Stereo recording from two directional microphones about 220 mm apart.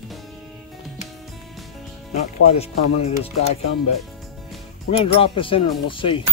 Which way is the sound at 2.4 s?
30° left (ahead or behind).